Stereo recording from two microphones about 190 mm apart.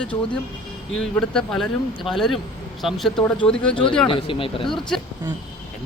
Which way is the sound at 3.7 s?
25° left (ahead or behind).